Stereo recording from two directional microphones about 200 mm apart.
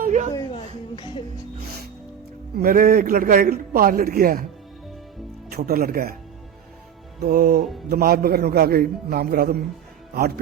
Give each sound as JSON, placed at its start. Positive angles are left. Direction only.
{"t": 0.0, "sound": "a sound", "side_deg": -40}
{"t": 0.3, "sound": "a sound", "side_deg": 20}
{"t": 0.9, "sound": "speech", "side_deg": 25}
{"t": 2.6, "sound": "a man's voice", "side_deg": -45}
{"t": 5.5, "sound": "a man's voice", "side_deg": -50}
{"t": 7.2, "sound": "a man's voice", "side_deg": -50}